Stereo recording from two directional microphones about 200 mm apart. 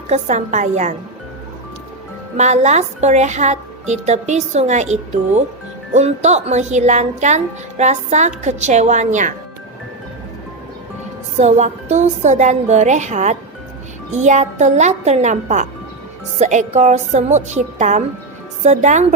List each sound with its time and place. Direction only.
0.1 s a woman's voice: 35° right (ahead or behind)
2.4 s a woman's voice: 35° right (ahead or behind)
11.3 s a woman's voice: 35° right (ahead or behind)